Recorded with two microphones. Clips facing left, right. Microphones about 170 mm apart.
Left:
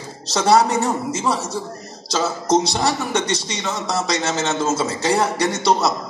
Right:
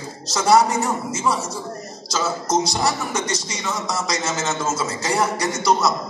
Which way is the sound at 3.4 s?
35° left (ahead or behind).